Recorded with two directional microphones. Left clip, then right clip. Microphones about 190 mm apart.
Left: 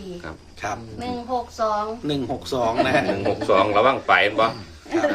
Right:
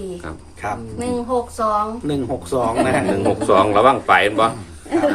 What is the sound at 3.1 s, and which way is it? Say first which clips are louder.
A man's voice: right 4 dB; 5° right (ahead or behind).